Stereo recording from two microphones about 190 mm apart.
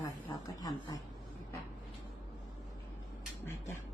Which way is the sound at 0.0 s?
20° left (ahead or behind).